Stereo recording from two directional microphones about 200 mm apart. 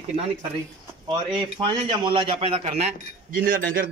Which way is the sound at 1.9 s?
25° right (ahead or behind).